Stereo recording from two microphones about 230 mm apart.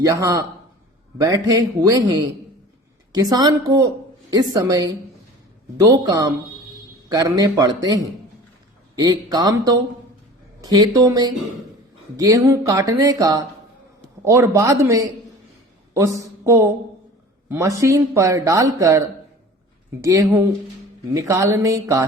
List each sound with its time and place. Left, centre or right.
0.0 s speech: centre